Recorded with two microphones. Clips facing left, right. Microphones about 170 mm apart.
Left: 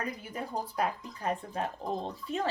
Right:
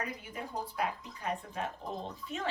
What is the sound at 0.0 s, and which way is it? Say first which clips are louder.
Speech: left 3 dB; 40° left (ahead or behind).